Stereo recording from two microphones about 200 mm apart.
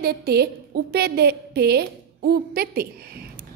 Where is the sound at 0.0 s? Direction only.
50° right (ahead or behind).